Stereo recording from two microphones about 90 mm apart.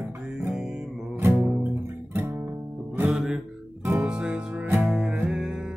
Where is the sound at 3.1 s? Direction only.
5° right (ahead or behind).